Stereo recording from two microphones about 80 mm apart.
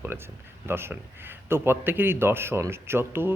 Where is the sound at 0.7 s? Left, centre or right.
Right.